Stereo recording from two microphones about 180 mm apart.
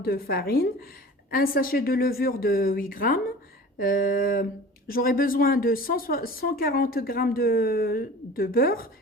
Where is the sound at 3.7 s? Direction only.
50° left (ahead or behind).